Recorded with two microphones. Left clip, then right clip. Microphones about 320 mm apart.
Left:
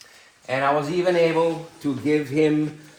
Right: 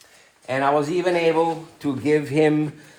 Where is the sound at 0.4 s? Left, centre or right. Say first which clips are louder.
Right 1 dB; right.